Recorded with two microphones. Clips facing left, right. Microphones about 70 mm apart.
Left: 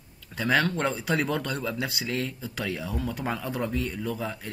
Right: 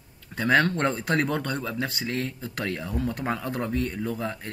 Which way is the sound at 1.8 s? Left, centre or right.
Right.